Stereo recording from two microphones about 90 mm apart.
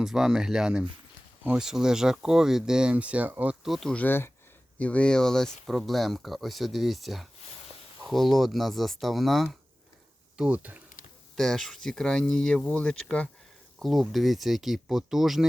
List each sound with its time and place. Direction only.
0.0 s speech: 5° right (ahead or behind)
3.6 s speech: centre (ahead or behind)
3.9 s speech: 20° left (ahead or behind); by 9.6 s centre (ahead or behind)
10.3 s speech: 15° right (ahead or behind)
11.3 s speech: 5° left (ahead or behind)
13.7 s speech: centre (ahead or behind)